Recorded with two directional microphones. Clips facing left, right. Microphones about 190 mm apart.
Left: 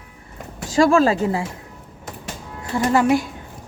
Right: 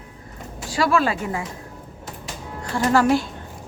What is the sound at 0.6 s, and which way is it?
Speech, 45° left (ahead or behind).